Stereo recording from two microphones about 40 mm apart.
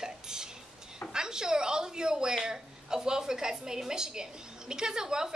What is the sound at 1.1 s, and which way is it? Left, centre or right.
A woman's voice, centre.